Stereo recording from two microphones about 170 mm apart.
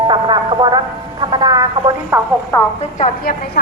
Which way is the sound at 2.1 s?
15° right (ahead or behind).